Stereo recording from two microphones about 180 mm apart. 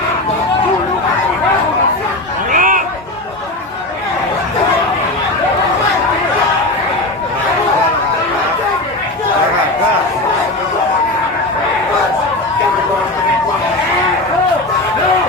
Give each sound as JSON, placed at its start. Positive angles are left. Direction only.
{"t": 2.5, "sound": "chatter", "side_deg": -50}